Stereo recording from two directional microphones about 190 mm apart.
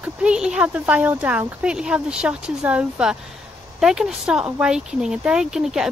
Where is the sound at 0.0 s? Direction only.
5° right (ahead or behind).